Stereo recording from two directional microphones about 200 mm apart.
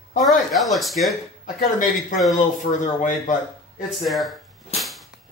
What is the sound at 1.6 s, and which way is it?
A man's voice, 40° left (ahead or behind).